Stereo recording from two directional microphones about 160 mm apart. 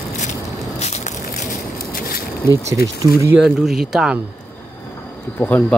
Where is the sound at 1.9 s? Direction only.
60° left (ahead or behind).